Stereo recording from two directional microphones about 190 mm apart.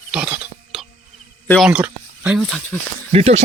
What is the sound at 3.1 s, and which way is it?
Speech, 35° right (ahead or behind).